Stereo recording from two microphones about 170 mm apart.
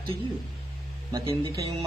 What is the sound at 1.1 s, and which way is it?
Speech, 20° right (ahead or behind).